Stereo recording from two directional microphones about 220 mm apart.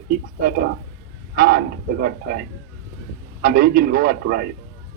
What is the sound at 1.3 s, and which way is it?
Speech, 40° right (ahead or behind).